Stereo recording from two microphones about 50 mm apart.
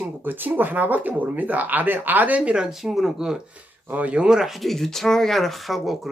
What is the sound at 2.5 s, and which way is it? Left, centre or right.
Speech, centre.